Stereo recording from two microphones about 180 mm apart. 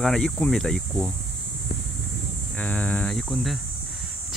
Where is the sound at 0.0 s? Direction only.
5° left (ahead or behind).